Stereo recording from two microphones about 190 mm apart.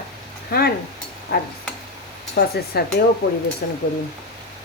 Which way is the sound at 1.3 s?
60° left (ahead or behind).